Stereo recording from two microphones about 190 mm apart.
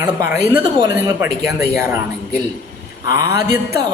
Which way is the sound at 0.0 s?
20° right (ahead or behind).